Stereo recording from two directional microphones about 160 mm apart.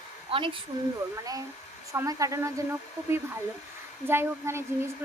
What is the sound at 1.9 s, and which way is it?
Speech, 20° right (ahead or behind).